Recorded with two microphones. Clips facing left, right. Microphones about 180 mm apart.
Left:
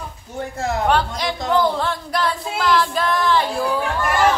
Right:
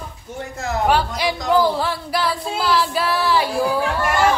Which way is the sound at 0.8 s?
5° right (ahead or behind).